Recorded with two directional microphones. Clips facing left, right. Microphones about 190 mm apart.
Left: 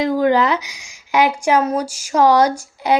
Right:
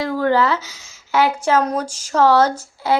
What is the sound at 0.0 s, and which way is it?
A woman's voice, 15° left (ahead or behind).